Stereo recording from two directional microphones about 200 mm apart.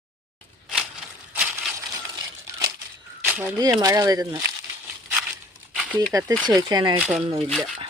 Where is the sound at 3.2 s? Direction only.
10° right (ahead or behind).